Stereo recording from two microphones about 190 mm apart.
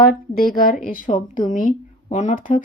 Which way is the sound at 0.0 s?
50° left (ahead or behind).